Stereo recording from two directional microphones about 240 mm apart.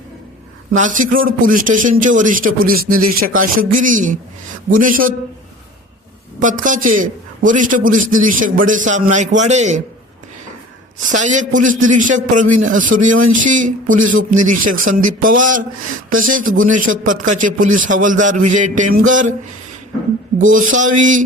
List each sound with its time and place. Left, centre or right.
0.8 s a man's voice: right
6.4 s a man's voice: right
11.1 s a man's voice: right
20.5 s a man's voice: right